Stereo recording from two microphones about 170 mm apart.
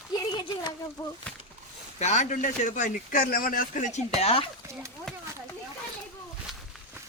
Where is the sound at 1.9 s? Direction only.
45° left (ahead or behind).